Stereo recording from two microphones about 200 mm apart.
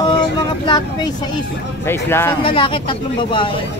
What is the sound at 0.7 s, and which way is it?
Speech, 20° left (ahead or behind).